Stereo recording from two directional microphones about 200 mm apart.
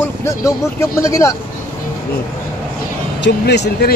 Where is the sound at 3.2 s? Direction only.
55° left (ahead or behind).